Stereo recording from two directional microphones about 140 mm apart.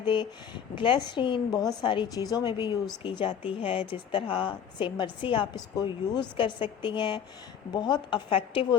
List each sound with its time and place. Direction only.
0.0 s a woman's voice: 35° left (ahead or behind)